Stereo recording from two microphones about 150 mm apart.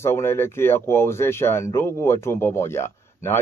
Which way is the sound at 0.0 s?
15° left (ahead or behind).